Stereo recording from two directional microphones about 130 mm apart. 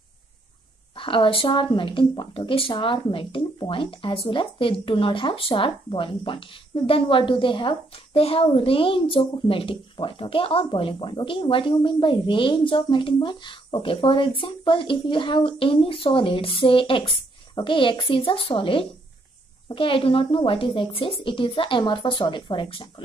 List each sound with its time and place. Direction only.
0.9 s speech: 40° left (ahead or behind)